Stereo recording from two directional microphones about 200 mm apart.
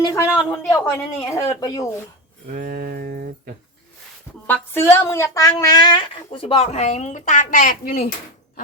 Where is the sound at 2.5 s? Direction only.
45° right (ahead or behind).